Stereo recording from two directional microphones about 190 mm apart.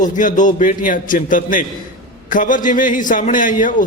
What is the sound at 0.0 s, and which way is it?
A man's voice, 45° left (ahead or behind).